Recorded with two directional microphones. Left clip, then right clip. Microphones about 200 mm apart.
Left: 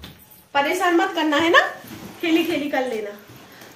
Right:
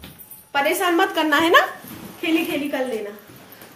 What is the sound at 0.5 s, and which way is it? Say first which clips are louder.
A woman's voice: even; 60° right (ahead or behind).